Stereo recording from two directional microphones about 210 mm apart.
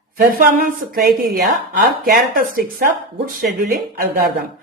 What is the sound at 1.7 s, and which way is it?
Speech, 40° right (ahead or behind).